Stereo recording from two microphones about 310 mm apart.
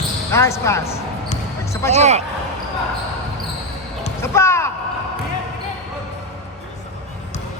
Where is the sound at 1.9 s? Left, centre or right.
Right.